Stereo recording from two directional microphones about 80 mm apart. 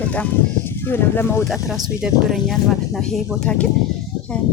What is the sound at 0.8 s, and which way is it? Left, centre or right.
Speech, left.